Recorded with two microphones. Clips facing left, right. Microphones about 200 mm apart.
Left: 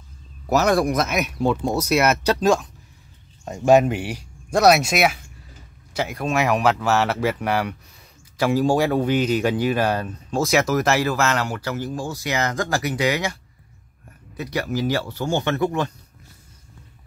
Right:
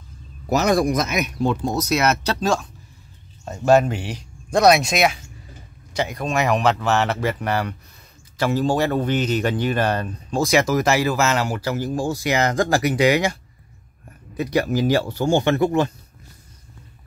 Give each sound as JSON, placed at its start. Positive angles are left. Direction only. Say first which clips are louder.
{"t": 0.5, "sound": "speech", "louder": "even", "side_deg": 5}
{"t": 12.4, "sound": "speech", "louder": "right 3 dB", "side_deg": -35}
{"t": 12.8, "sound": "speech", "louder": "right 5 dB", "side_deg": -15}
{"t": 14.3, "sound": "speech", "louder": "right 5 dB", "side_deg": -20}